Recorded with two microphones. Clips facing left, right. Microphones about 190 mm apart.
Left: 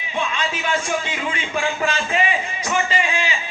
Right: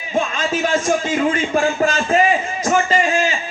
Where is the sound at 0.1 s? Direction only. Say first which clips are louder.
Right 5 dB; 45° right (ahead or behind).